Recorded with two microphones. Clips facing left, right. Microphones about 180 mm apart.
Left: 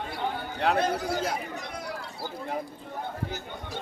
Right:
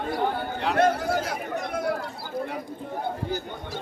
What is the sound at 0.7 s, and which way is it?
Speech, 60° right (ahead or behind).